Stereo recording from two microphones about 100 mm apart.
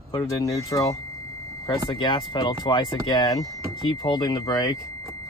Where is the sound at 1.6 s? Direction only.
50° left (ahead or behind).